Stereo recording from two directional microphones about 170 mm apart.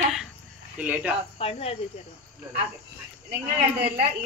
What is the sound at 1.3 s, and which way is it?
Speech, 35° left (ahead or behind).